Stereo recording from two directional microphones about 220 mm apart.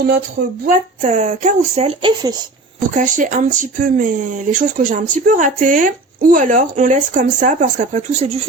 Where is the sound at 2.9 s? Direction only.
35° right (ahead or behind).